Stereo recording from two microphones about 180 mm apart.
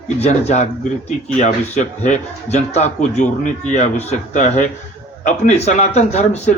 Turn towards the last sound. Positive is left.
turn(degrees=40)  # may be behind; listen again after turning